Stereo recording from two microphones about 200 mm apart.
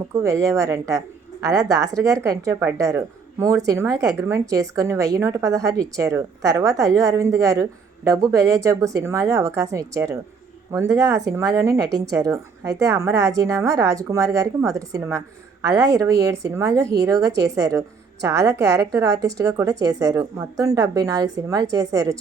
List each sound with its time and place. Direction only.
0.2 s a woman's voice: 15° right (ahead or behind)